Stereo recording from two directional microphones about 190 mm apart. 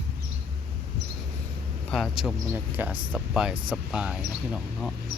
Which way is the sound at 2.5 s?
10° right (ahead or behind).